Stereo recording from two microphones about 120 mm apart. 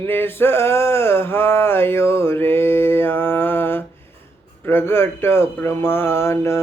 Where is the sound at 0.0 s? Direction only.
20° left (ahead or behind).